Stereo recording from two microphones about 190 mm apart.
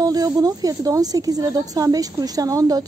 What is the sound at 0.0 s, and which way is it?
Speech, 20° right (ahead or behind).